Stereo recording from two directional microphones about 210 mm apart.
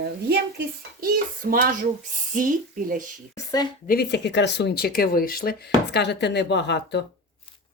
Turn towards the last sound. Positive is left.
turn(degrees=55)  # may be behind; listen again after turning